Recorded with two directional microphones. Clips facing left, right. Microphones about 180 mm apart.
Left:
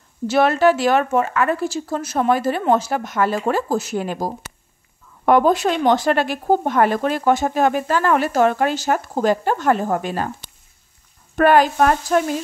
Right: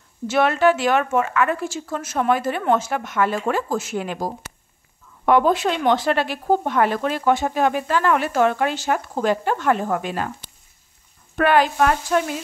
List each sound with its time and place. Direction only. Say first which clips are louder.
0.3 s speech: left 2 dB; 35° left (ahead or behind)
11.3 s speech: left 3 dB; 40° left (ahead or behind)